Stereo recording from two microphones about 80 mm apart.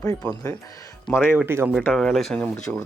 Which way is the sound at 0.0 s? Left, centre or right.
Left.